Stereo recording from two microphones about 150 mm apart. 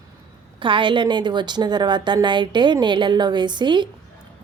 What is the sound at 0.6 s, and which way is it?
A woman's voice, 35° right (ahead or behind).